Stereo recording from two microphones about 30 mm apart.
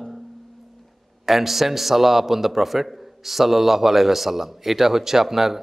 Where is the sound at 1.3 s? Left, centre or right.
Centre.